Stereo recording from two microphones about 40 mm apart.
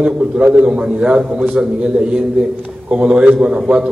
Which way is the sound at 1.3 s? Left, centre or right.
Right.